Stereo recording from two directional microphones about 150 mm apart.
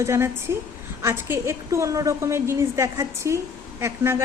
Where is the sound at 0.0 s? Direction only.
20° right (ahead or behind).